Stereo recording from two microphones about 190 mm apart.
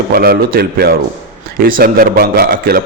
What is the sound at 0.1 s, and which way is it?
A man's voice, 55° right (ahead or behind).